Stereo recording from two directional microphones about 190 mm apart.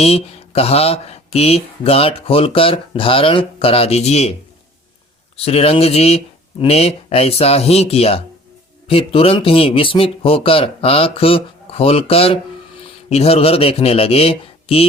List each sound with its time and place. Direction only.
0.0 s speech: 30° left (ahead or behind)
5.5 s speech: 30° left (ahead or behind)